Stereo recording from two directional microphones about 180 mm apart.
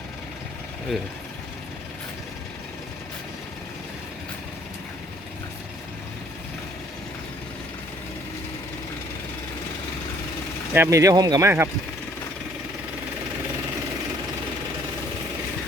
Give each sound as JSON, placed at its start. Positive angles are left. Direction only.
{"t": 10.8, "sound": "speech", "side_deg": -15}